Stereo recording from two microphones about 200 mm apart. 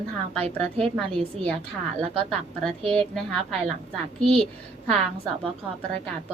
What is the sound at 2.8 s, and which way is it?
Speech, 5° left (ahead or behind).